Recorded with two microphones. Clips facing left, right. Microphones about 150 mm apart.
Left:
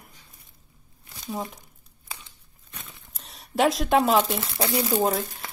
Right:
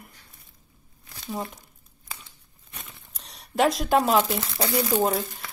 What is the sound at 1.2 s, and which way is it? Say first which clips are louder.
Speech: even; centre (ahead or behind).